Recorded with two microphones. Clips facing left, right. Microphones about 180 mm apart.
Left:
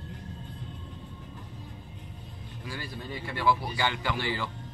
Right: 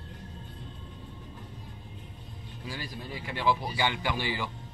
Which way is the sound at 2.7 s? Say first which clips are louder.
Left 1 dB; 15° right (ahead or behind).